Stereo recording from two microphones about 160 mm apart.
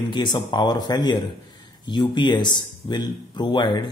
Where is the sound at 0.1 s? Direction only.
30° left (ahead or behind).